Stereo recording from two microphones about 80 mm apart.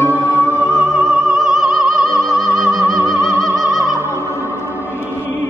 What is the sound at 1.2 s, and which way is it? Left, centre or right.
Music, centre.